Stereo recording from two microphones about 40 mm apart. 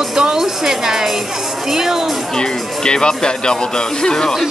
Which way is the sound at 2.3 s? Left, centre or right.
Centre.